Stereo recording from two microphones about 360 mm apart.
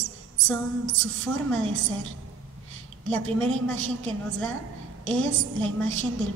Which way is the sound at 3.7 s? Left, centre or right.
Right.